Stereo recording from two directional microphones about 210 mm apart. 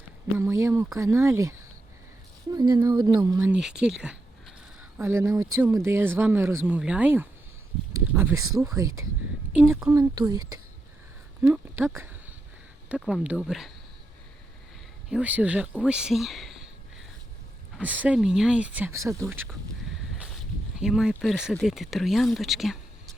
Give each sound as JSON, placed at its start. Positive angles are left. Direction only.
{"t": 0.3, "sound": "speech", "side_deg": -15}
{"t": 11.4, "sound": "speech", "side_deg": -10}
{"t": 15.1, "sound": "speech", "side_deg": -5}
{"t": 20.7, "sound": "speech", "side_deg": -5}